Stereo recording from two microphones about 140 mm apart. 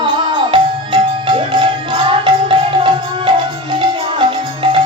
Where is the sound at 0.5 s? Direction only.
35° right (ahead or behind).